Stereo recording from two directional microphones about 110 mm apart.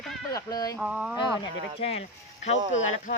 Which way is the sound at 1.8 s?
70° left (ahead or behind).